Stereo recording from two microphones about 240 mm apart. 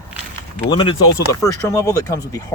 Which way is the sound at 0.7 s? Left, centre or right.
Left.